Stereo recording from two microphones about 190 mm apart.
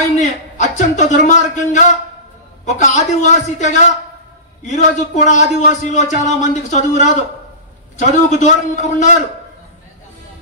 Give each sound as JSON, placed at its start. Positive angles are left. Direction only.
{"t": 0.2, "sound": "a man's voice", "side_deg": 40}